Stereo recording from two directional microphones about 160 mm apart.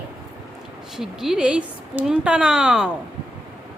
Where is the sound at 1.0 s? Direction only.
5° right (ahead or behind).